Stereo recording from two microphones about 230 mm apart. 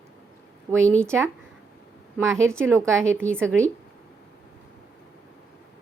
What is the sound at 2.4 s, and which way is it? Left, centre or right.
A woman's voice, centre.